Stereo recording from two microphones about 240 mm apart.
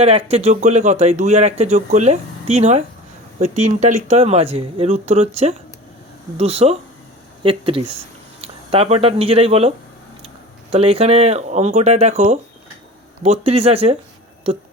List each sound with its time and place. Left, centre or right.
0.0 s speech: right